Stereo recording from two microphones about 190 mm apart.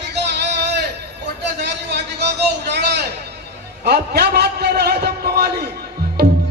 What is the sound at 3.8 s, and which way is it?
A man's voice, 60° right (ahead or behind).